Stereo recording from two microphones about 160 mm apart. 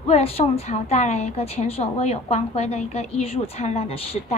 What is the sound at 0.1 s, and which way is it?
A woman's voice, 40° left (ahead or behind).